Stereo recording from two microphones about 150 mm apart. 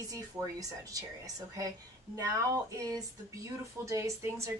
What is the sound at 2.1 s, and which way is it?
A woman's voice, 25° right (ahead or behind).